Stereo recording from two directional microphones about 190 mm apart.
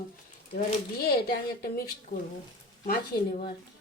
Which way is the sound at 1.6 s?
55° left (ahead or behind).